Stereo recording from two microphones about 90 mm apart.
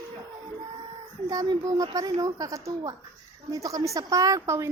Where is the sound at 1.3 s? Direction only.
45° right (ahead or behind).